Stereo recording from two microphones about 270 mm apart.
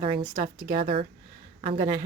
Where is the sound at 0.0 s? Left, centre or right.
Centre.